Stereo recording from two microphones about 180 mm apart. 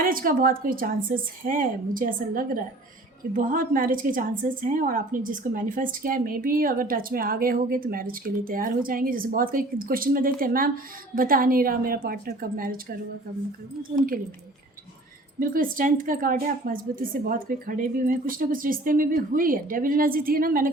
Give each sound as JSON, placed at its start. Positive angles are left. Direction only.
{"t": 0.0, "sound": "a woman's voice", "side_deg": -50}
{"t": 15.4, "sound": "a woman's voice", "side_deg": -50}